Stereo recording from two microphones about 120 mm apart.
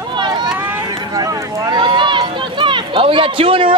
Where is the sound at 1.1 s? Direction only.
35° right (ahead or behind).